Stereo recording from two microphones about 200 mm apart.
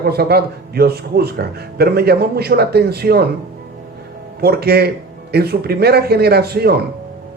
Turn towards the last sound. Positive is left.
turn(degrees=-50)  # may be behind; listen again after turning